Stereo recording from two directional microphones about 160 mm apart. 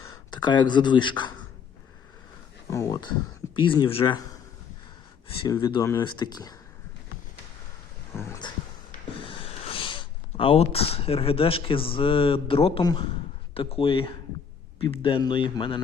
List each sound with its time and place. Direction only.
0.0 s speech: 25° left (ahead or behind)
2.6 s speech: 20° left (ahead or behind)
5.5 s speech: 20° left (ahead or behind)
9.5 s a man's voice: 35° left (ahead or behind)